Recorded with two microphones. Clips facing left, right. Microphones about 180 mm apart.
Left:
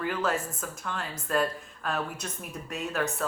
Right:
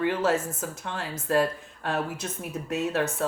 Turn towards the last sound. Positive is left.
turn(degrees=-30)  # may be behind; listen again after turning